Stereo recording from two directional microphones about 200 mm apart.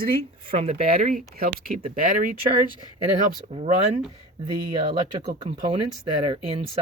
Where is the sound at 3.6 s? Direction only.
35° right (ahead or behind).